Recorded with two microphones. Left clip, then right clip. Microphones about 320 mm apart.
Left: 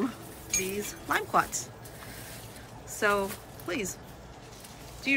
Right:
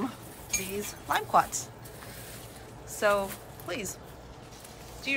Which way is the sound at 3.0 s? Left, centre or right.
Centre.